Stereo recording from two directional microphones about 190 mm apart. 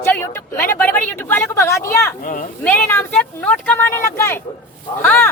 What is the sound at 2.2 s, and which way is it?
Speech, 45° left (ahead or behind).